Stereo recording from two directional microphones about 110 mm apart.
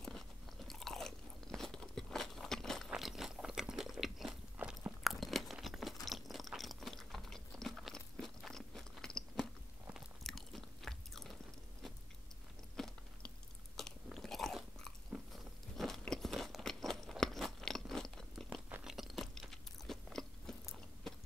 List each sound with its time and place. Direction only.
0.7 s biting: centre (ahead or behind)
2.9 s crunch: 5° right (ahead or behind)
4.6 s biting: 15° right (ahead or behind)
5.0 s crunch: centre (ahead or behind)
6.0 s chewing: centre (ahead or behind)
12.7 s biting: 5° left (ahead or behind)
15.8 s crunch: centre (ahead or behind)
18.9 s biting: centre (ahead or behind)